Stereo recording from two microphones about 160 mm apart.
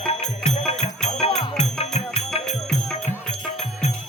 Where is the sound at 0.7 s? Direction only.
45° left (ahead or behind).